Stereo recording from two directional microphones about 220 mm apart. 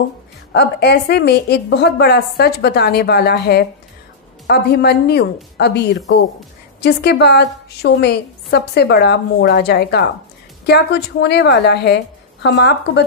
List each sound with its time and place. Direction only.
0.5 s a woman's voice: 50° left (ahead or behind)